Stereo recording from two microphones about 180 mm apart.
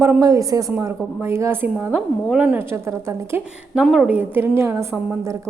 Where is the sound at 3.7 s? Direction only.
Centre (ahead or behind).